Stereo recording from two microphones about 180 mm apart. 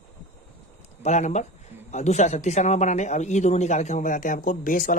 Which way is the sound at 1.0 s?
40° left (ahead or behind).